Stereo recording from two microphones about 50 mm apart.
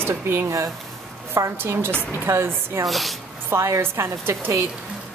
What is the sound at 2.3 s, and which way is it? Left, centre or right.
Speech, right.